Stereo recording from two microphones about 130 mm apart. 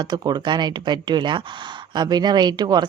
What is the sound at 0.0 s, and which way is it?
A woman's voice, 35° right (ahead or behind).